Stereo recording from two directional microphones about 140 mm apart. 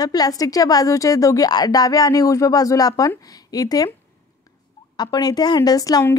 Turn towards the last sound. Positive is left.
turn(degrees=25)  # may be behind; listen again after turning